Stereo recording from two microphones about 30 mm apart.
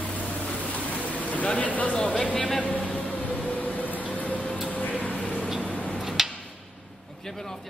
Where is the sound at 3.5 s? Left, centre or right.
Left.